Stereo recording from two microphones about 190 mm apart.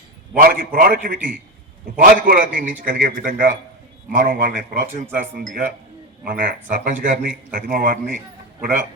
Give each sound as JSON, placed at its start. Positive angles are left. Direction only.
{"t": 0.3, "sound": "speech", "side_deg": -45}